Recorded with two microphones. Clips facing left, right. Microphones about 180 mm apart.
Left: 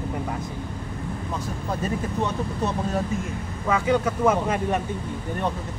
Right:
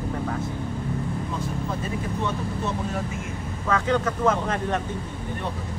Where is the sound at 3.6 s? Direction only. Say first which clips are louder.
Left 2 dB; 10° left (ahead or behind).